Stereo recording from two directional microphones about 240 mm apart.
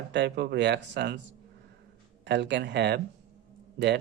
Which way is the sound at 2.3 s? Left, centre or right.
Right.